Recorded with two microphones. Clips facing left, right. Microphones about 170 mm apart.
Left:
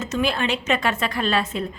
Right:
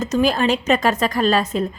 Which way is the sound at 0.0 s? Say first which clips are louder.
Right 5 dB; 40° right (ahead or behind).